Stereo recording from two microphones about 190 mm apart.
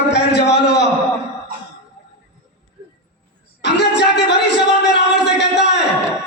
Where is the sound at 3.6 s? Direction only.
65° left (ahead or behind).